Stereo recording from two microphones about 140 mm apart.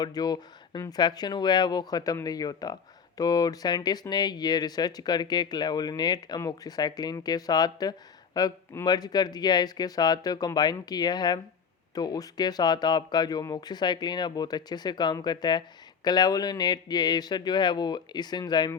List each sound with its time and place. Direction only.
0.0 s speech: 30° left (ahead or behind)